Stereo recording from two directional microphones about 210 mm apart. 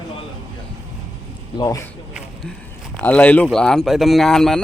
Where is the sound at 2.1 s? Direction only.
5° left (ahead or behind).